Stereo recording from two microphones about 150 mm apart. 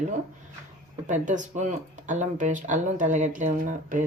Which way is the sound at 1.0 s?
55° right (ahead or behind).